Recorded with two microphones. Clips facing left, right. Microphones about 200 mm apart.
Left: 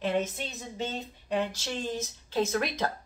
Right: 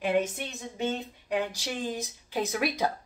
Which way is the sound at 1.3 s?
15° right (ahead or behind).